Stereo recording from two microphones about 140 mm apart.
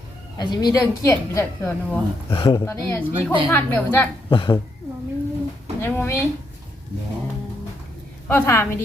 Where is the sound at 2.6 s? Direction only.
20° left (ahead or behind).